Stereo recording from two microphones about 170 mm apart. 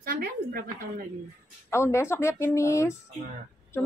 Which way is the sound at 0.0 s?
60° right (ahead or behind).